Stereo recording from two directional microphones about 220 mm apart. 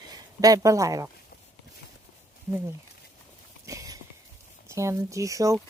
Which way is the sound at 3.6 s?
15° right (ahead or behind).